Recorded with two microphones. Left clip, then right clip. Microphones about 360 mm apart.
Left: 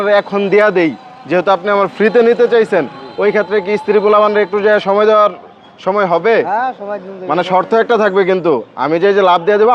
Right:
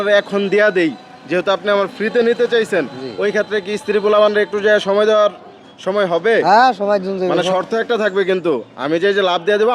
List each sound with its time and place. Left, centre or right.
0.0 s speech: centre
6.4 s speech: right
7.3 s speech: centre